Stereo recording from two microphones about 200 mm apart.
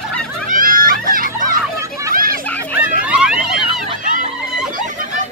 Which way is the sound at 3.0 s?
5° right (ahead or behind).